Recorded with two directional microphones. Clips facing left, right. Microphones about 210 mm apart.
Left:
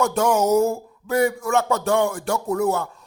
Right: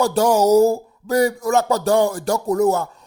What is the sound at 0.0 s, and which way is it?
A man's voice, 35° right (ahead or behind).